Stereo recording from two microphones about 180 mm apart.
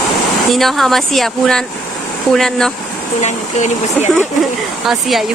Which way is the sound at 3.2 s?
40° left (ahead or behind).